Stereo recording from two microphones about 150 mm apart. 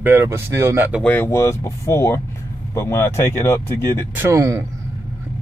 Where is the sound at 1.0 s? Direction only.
10° left (ahead or behind).